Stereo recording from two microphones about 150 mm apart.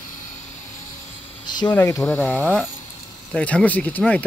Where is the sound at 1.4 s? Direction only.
30° left (ahead or behind).